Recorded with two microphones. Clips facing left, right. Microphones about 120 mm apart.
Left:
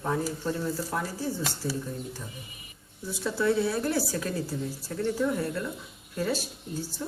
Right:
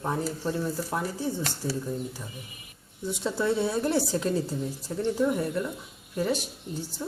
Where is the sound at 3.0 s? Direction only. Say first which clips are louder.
Even; 20° right (ahead or behind).